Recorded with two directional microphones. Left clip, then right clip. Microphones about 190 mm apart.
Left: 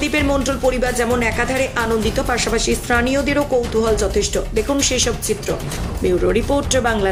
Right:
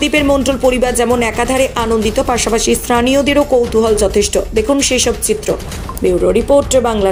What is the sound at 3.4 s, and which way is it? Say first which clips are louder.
Speech: right 6 dB; centre (ahead or behind).